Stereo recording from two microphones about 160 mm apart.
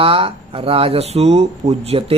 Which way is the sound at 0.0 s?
35° right (ahead or behind).